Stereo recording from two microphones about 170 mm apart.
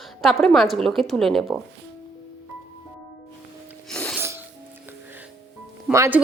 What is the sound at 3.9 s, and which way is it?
Music, 5° left (ahead or behind).